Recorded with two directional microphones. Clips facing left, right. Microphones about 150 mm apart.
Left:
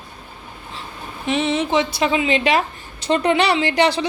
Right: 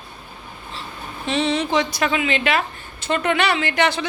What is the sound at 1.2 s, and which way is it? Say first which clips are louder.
A woman's voice: left 1 dB; 20° left (ahead or behind).